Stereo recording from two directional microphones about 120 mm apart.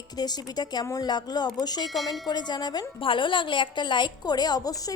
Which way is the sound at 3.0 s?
45° left (ahead or behind).